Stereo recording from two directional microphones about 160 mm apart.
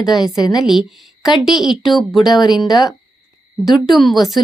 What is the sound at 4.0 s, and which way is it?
Speech, centre (ahead or behind).